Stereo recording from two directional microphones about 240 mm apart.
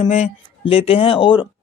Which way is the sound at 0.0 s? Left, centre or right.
Left.